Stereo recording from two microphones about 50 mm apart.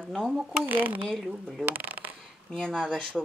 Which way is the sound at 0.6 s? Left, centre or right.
Right.